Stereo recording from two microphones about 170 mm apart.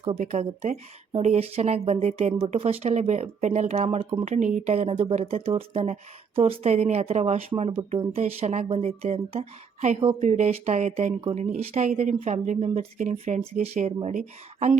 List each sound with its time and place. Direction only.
0.3 s speech: 40° right (ahead or behind)
4.4 s speech: 45° right (ahead or behind)